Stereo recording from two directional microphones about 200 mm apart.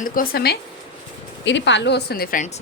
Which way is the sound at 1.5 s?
65° left (ahead or behind).